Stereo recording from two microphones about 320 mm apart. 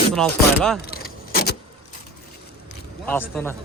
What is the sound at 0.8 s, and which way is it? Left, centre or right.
Keys jangling, left.